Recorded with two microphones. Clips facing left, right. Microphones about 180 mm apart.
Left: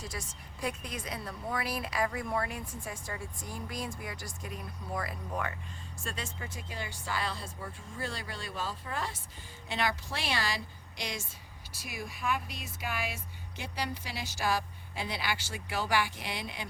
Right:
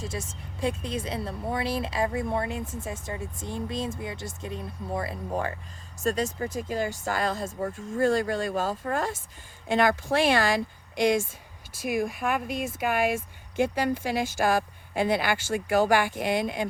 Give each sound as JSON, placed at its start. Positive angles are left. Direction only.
{"t": 0.0, "sound": "a woman's voice", "side_deg": -25}